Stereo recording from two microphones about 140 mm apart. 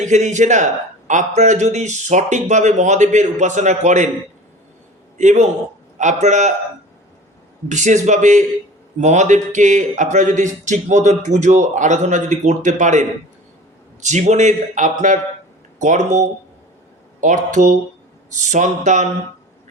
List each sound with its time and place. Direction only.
0.0 s a man's voice: 60° right (ahead or behind)
5.1 s a man's voice: 60° right (ahead or behind)
7.7 s a man's voice: 60° right (ahead or behind)